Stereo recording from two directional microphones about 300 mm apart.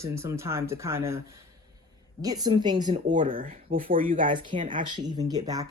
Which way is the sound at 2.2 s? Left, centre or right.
Centre.